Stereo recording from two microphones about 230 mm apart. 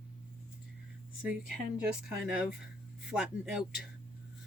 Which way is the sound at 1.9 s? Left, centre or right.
Centre.